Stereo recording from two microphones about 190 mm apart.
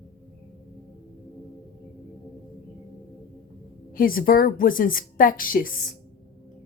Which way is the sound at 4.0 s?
50° left (ahead or behind).